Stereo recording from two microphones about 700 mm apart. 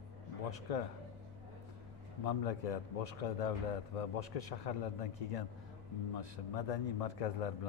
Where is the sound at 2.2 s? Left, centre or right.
Left.